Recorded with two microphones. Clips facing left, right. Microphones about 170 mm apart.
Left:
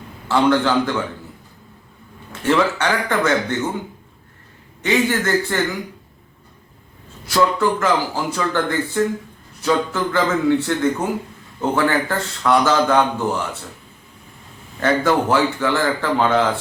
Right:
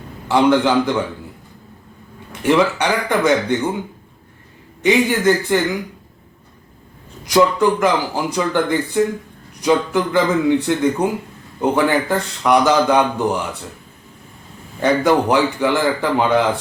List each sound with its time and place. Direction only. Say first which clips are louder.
0.3 s a man's voice: right 2 dB; 15° right (ahead or behind)
2.4 s a man's voice: right 2 dB; 15° right (ahead or behind)
4.8 s a man's voice: right 3 dB; 15° right (ahead or behind)
7.3 s a man's voice: right 3 dB; 15° right (ahead or behind)
14.8 s a man's voice: right 2 dB; 15° right (ahead or behind)